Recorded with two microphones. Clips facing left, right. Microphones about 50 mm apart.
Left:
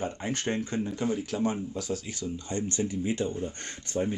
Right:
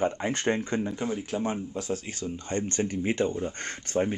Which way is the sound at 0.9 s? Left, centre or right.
Right.